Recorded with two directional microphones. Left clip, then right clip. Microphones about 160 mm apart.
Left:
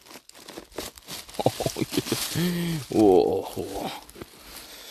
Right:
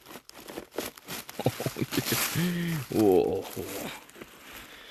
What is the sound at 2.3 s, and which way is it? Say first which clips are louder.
Speech: left 3 dB; 45° left (ahead or behind).